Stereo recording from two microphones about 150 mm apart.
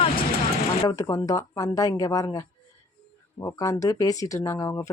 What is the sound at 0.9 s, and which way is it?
Speech, 25° left (ahead or behind).